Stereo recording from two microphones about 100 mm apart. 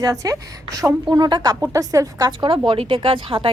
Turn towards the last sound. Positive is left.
turn(degrees=-65)  # may be behind; listen again after turning